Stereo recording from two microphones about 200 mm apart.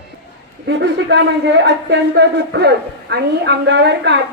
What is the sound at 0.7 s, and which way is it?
Speech, 60° right (ahead or behind).